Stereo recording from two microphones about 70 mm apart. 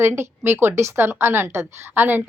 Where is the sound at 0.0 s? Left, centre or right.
Right.